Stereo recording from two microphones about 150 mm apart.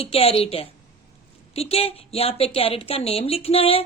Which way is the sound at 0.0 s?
40° left (ahead or behind).